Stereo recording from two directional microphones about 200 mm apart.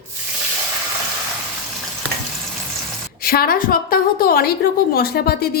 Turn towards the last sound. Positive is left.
turn(degrees=50)  # may be behind; listen again after turning